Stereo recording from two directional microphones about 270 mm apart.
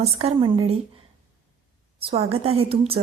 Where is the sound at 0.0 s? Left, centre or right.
Right.